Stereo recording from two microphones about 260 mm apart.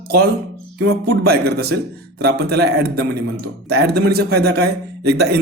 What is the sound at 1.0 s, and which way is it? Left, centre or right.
A man's voice, right.